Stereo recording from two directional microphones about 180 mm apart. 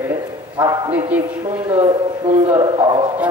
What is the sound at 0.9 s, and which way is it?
Speech, 10° right (ahead or behind).